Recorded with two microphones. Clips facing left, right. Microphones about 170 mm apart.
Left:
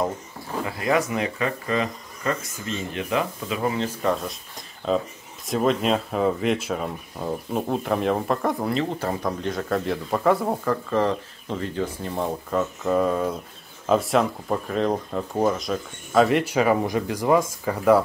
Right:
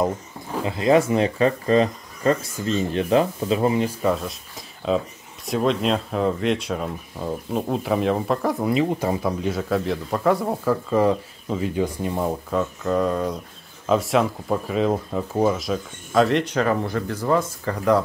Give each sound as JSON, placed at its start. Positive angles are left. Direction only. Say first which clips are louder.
{"t": 0.7, "sound": "speech", "louder": "right 6 dB", "side_deg": -25}
{"t": 3.7, "sound": "speech", "louder": "right 4 dB", "side_deg": -10}
{"t": 4.1, "sound": "speech", "louder": "right 1 dB", "side_deg": 0}
{"t": 8.6, "sound": "speech", "louder": "right 4 dB", "side_deg": -15}
{"t": 12.4, "sound": "speech", "louder": "even", "side_deg": 5}